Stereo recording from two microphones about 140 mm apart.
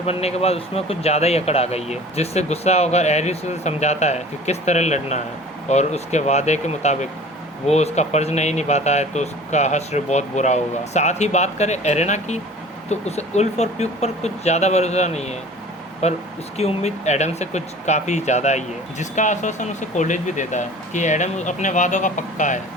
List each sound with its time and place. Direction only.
0.0 s speech: 45° left (ahead or behind); by 22.6 s 60° left (ahead or behind)